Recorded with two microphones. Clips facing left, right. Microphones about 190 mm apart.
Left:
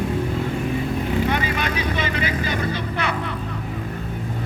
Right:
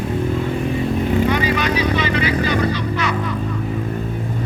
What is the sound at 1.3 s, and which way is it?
Vehicle, 50° left (ahead or behind).